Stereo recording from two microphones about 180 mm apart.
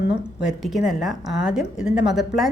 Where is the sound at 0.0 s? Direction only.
75° left (ahead or behind).